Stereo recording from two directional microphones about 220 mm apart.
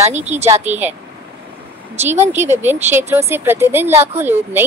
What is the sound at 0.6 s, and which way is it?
Speech, 10° right (ahead or behind).